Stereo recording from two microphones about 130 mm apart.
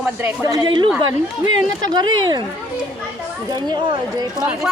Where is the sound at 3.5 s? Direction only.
35° right (ahead or behind).